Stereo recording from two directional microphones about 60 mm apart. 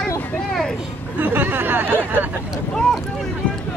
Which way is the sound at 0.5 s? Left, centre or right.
Centre.